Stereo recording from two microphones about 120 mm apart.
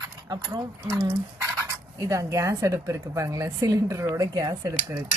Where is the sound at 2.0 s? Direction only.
25° right (ahead or behind).